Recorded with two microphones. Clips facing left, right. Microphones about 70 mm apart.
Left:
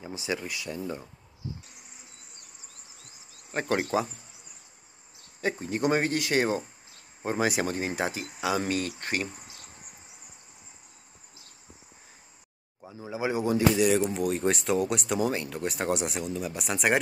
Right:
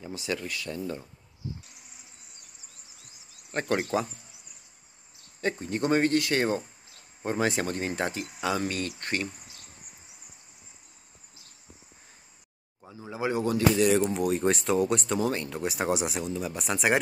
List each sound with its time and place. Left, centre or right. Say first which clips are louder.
0.0 s speech: even; centre
3.5 s speech: even; centre
5.4 s speech: left 1 dB; centre
13.0 s speech: even; centre
13.8 s speech: right 1 dB; centre
15.5 s speech: right 1 dB; centre